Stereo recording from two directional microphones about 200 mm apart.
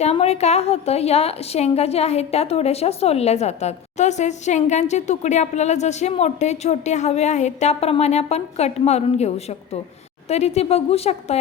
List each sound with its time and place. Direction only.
0.0 s a woman's voice: 30° left (ahead or behind)